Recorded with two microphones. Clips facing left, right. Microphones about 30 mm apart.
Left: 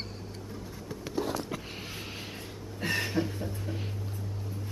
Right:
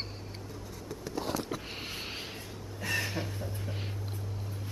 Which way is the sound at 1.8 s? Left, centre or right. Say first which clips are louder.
Right 1 dB; centre.